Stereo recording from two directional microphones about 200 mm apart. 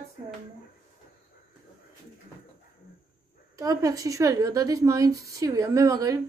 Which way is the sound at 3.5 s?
15° right (ahead or behind).